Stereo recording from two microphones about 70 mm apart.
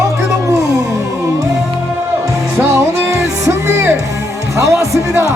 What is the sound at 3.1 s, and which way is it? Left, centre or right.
Music, right.